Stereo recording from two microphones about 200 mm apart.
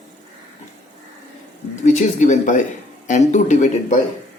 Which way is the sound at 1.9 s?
35° left (ahead or behind).